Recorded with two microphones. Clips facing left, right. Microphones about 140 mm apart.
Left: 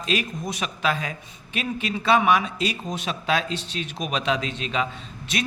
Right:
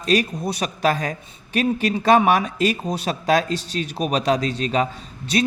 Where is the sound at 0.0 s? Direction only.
40° right (ahead or behind).